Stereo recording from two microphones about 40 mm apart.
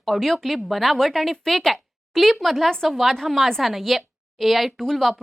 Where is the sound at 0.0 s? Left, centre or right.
Centre.